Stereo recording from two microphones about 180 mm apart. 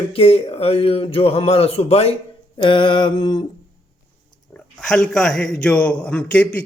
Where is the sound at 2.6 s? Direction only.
25° left (ahead or behind).